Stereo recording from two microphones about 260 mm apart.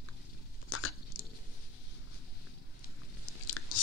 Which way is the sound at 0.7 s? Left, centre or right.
Left.